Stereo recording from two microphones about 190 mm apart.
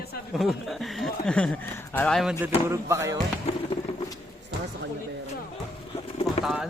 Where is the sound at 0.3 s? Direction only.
Centre (ahead or behind).